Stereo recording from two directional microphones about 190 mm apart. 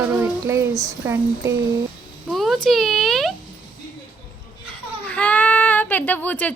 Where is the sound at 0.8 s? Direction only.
15° right (ahead or behind).